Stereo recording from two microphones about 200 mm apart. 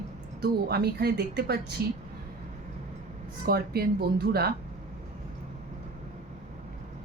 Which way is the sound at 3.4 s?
50° right (ahead or behind).